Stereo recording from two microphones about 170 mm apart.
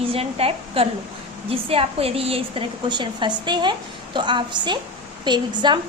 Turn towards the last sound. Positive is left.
turn(degrees=-25)  # may be behind; listen again after turning